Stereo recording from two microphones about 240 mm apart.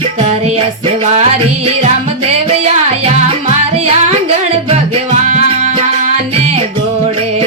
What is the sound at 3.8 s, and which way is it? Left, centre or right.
Music, right.